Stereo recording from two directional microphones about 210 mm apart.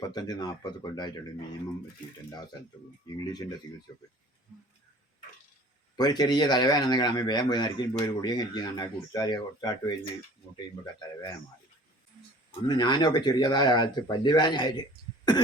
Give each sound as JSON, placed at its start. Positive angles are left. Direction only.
{"t": 0.1, "sound": "a man's voice", "side_deg": 20}
{"t": 3.1, "sound": "a man's voice", "side_deg": 20}
{"t": 6.0, "sound": "a man's voice", "side_deg": 20}
{"t": 12.6, "sound": "a man's voice", "side_deg": 20}